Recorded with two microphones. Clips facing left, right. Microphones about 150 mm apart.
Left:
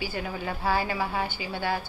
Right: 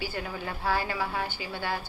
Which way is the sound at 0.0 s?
15° left (ahead or behind).